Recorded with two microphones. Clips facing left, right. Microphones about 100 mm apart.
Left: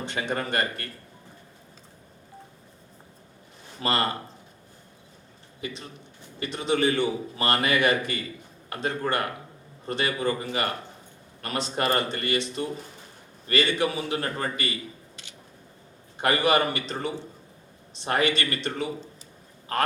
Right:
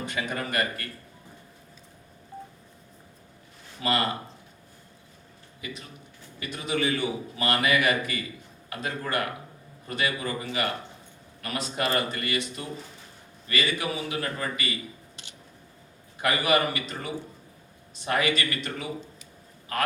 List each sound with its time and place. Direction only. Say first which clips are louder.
0.0 s a man's voice: left 2 dB; 30° left (ahead or behind)
3.8 s a man's voice: left 1 dB; 35° left (ahead or behind)
5.5 s a man's voice: left 4 dB; 30° left (ahead or behind)
11.4 s a man's voice: left 3 dB; 30° left (ahead or behind)
16.1 s a man's voice: left 2 dB; 30° left (ahead or behind)